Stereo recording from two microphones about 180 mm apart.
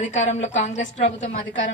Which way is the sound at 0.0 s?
40° left (ahead or behind).